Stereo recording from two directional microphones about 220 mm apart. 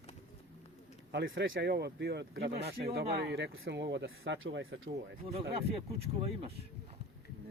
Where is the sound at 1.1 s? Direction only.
55° right (ahead or behind).